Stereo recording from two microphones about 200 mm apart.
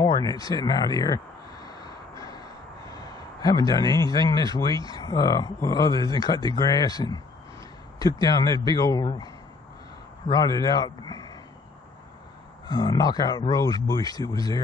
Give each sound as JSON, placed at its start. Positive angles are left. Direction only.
{"t": 0.0, "sound": "a sound", "side_deg": 20}
{"t": 2.9, "sound": "a man's voice", "side_deg": 20}
{"t": 8.2, "sound": "a man's voice", "side_deg": 20}
{"t": 12.6, "sound": "a man's voice", "side_deg": 20}